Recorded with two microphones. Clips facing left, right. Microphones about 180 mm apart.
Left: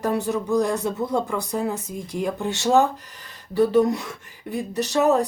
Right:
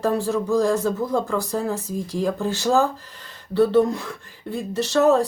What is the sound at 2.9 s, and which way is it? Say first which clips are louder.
Speech: right 1 dB; 75° left (ahead or behind).